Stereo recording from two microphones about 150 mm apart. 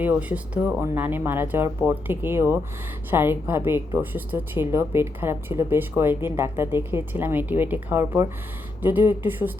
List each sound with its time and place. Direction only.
0.0 s speech: 10° right (ahead or behind)